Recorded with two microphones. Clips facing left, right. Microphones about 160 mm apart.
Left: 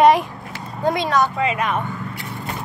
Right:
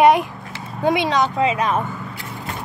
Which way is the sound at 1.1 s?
20° right (ahead or behind).